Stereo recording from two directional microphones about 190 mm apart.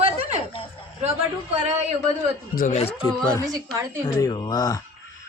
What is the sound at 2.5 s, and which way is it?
Speech, 45° left (ahead or behind).